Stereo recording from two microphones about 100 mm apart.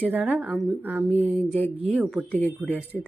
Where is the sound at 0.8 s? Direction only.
20° right (ahead or behind).